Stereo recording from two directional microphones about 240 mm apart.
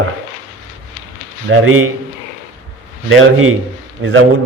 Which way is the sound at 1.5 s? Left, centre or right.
Right.